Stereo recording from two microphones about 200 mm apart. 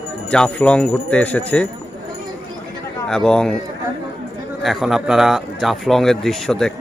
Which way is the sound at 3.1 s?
5° left (ahead or behind).